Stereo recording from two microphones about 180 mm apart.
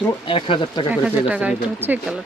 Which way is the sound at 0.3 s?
30° left (ahead or behind).